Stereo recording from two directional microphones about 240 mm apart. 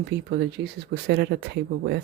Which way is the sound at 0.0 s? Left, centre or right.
Right.